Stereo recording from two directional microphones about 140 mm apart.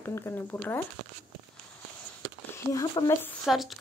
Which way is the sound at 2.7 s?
25° left (ahead or behind).